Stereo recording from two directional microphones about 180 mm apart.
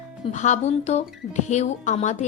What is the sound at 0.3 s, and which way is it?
A woman's voice, 40° left (ahead or behind).